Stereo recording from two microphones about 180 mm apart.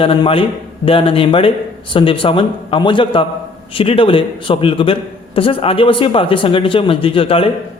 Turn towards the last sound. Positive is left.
turn(degrees=30)  # may be behind; listen again after turning